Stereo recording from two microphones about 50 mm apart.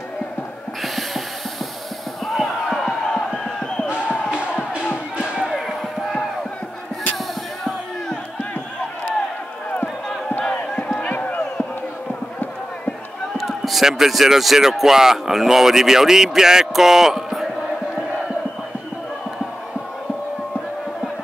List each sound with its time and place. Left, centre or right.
0.8 s a sound: centre
2.2 s music: centre
2.9 s crowd: centre
3.8 s basketball bounce: centre
4.3 s music: centre
5.1 s a sound: centre
5.5 s a sound: centre
10.4 s crowd: left
11.0 s chop: left
13.4 s speech: centre